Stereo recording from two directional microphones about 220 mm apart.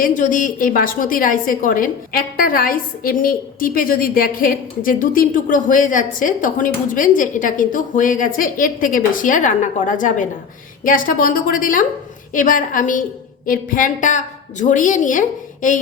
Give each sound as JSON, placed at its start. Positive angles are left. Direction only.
{"t": 0.0, "sound": "a woman's voice", "side_deg": 35}